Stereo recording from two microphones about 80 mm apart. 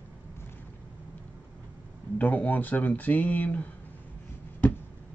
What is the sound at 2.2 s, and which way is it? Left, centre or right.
Speech, left.